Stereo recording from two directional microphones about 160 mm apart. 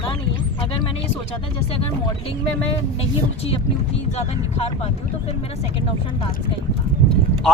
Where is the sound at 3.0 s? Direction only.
40° left (ahead or behind).